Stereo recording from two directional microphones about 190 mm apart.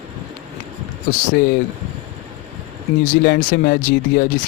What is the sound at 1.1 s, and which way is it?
Speech, 45° left (ahead or behind).